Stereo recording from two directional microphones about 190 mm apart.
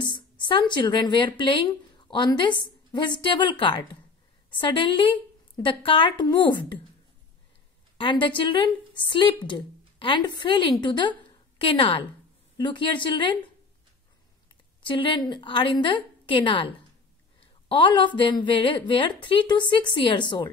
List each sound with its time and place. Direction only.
0.0 s a woman's voice: 25° left (ahead or behind)
8.0 s a woman's voice: 25° left (ahead or behind)
14.8 s a woman's voice: 25° left (ahead or behind)